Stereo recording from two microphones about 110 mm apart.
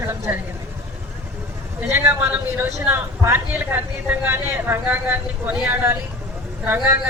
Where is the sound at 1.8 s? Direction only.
20° right (ahead or behind).